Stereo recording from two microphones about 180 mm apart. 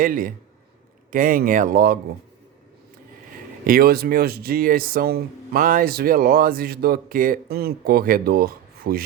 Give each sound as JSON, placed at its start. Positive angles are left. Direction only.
{"t": 0.0, "sound": "speech", "side_deg": -50}
{"t": 3.6, "sound": "speech", "side_deg": -55}